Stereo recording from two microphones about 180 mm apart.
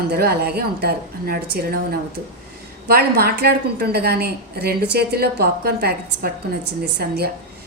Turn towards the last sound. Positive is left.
turn(degrees=-60)  # may be behind; listen again after turning